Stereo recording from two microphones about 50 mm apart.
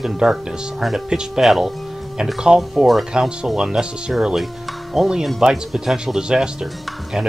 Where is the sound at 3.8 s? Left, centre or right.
Centre.